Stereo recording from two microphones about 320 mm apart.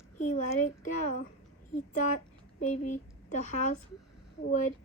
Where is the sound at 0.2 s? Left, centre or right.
Left.